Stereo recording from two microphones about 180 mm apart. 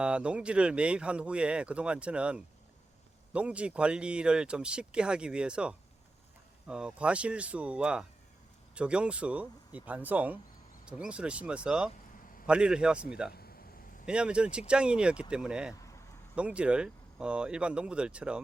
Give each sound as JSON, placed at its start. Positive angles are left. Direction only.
{"t": 0.0, "sound": "speech", "side_deg": -5}
{"t": 13.3, "sound": "a sound", "side_deg": 60}
{"t": 14.1, "sound": "speech", "side_deg": -5}